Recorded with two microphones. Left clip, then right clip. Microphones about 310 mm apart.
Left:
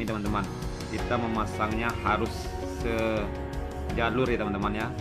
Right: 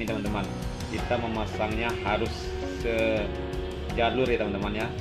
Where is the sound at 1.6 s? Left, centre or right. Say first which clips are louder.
Even; left.